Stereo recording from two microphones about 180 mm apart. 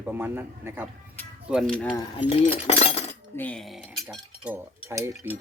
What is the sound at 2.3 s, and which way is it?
Speech, 35° left (ahead or behind).